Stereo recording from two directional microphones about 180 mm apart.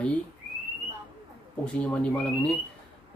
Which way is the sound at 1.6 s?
5° left (ahead or behind).